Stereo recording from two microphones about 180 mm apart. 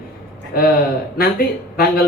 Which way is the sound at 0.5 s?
55° left (ahead or behind).